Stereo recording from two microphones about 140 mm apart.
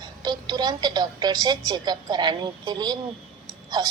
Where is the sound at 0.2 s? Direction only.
30° right (ahead or behind).